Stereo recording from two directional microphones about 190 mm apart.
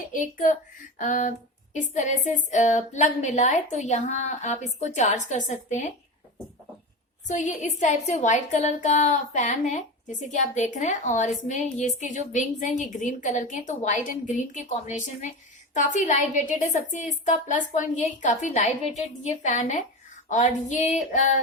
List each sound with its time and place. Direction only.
0.1 s a woman's voice: 45° left (ahead or behind)
7.3 s a woman's voice: 40° left (ahead or behind)